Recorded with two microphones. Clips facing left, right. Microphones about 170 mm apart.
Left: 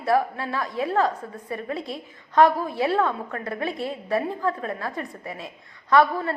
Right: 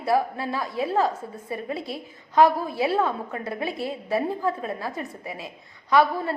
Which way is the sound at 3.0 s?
15° right (ahead or behind).